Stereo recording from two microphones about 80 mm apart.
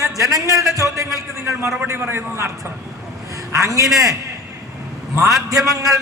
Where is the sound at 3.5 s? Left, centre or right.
Right.